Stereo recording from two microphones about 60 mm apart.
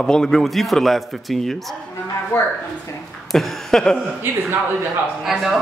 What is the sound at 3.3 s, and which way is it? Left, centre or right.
Speech, centre.